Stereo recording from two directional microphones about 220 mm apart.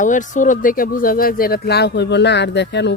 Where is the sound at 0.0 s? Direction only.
35° left (ahead or behind).